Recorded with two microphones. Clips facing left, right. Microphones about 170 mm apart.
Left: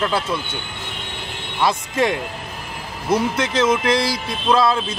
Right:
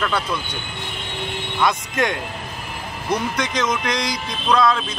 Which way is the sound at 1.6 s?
30° left (ahead or behind).